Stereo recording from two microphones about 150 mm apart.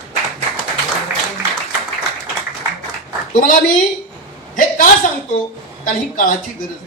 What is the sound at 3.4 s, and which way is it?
Speech, 65° left (ahead or behind).